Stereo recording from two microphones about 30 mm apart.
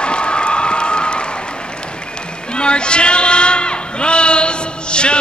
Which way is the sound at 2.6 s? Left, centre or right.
Left.